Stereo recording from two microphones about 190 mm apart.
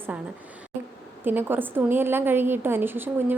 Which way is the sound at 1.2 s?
10° right (ahead or behind).